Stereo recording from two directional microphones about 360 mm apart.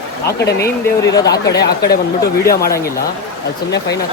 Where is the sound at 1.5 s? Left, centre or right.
Left.